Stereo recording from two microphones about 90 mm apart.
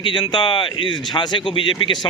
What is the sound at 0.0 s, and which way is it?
A man's voice, 65° left (ahead or behind).